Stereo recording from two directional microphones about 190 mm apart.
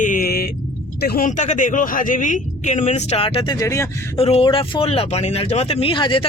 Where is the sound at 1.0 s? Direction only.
50° left (ahead or behind); by 3.6 s 30° left (ahead or behind).